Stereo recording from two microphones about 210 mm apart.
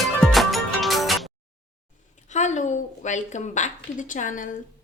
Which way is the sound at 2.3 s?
35° left (ahead or behind).